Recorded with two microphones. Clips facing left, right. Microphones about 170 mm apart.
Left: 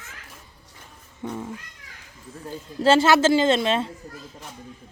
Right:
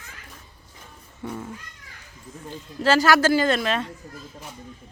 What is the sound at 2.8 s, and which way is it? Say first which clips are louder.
A woman's voice: left 2 dB; 25° left (ahead or behind).